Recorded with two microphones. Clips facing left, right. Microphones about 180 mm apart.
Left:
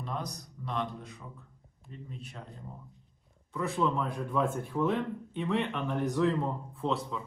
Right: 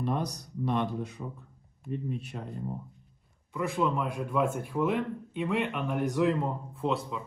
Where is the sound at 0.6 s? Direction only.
60° right (ahead or behind).